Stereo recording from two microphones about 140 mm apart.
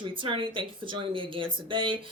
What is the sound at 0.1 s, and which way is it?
Speech, 40° right (ahead or behind).